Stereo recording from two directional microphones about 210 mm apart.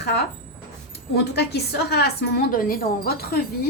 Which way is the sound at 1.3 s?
50° left (ahead or behind).